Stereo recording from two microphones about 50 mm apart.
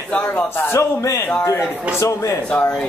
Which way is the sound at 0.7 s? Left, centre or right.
Left.